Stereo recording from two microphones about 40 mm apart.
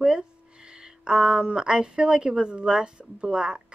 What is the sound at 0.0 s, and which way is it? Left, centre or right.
A woman's voice, right.